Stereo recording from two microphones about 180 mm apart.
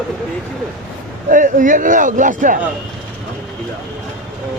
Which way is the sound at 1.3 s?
45° right (ahead or behind).